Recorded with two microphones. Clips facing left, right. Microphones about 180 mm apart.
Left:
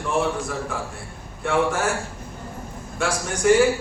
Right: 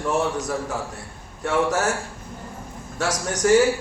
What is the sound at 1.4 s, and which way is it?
Speech, 40° right (ahead or behind).